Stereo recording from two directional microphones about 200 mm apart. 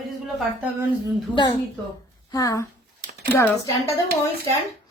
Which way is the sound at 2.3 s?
15° left (ahead or behind).